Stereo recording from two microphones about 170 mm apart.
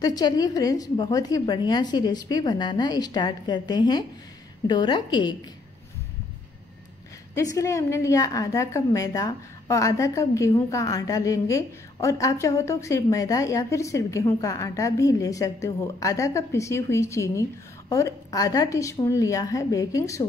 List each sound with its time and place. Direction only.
0.0 s a woman's voice: 20° left (ahead or behind)
7.3 s a woman's voice: 20° left (ahead or behind)